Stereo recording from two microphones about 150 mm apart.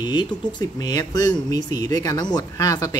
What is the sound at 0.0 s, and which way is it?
Speech, 30° left (ahead or behind).